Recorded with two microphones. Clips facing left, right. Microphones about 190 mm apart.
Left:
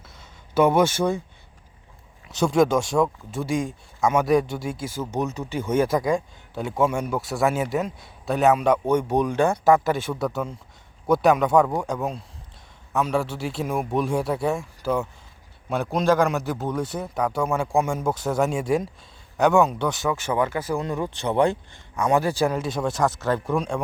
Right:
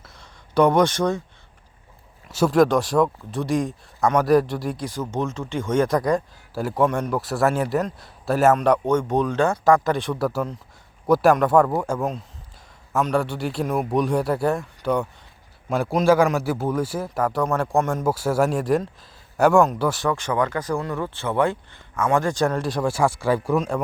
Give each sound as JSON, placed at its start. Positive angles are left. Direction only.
{"t": 0.0, "sound": "a sound", "side_deg": 5}
{"t": 2.3, "sound": "speech", "side_deg": -5}
{"t": 8.9, "sound": "speech", "side_deg": 10}
{"t": 17.7, "sound": "speech", "side_deg": 10}
{"t": 18.0, "sound": "speech", "side_deg": -5}
{"t": 20.7, "sound": "speech", "side_deg": 20}